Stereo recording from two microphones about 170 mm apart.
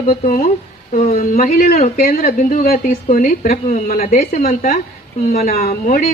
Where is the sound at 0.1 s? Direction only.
55° left (ahead or behind).